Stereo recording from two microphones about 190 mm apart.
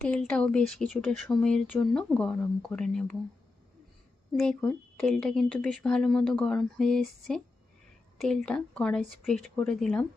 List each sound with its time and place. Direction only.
0.0 s speech: 5° left (ahead or behind)
4.4 s speech: 5° left (ahead or behind)
8.4 s speech: 5° left (ahead or behind)